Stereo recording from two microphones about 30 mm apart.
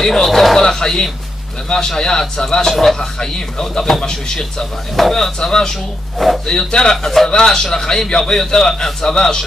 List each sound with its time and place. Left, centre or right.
0.0 s speech: centre
0.3 s speech: centre
0.6 s speech: centre
2.7 s speech: centre
3.0 s speech: left
6.1 s speech: centre
6.4 s speech: centre